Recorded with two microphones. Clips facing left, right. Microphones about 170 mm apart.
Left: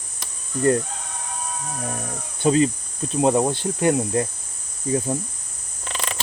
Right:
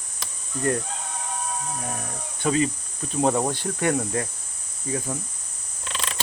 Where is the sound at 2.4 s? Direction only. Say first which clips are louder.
Left 5 dB; 30° left (ahead or behind).